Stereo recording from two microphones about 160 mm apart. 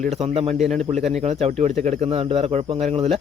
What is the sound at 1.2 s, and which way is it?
Speech, 40° right (ahead or behind).